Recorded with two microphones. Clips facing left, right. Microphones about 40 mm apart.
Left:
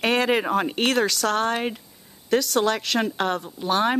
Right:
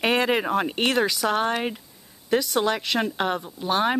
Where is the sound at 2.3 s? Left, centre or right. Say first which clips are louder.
Left 1 dB; centre.